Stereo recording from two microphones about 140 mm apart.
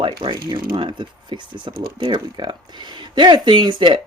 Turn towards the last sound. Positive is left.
turn(degrees=-35)  # may be behind; listen again after turning